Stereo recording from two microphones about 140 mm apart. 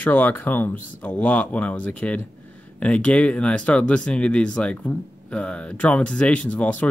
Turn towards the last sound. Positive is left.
turn(degrees=10)  # may be behind; listen again after turning